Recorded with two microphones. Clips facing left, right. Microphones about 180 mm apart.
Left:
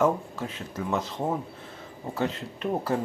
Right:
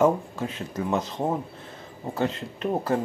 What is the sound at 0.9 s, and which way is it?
Speech, 15° right (ahead or behind).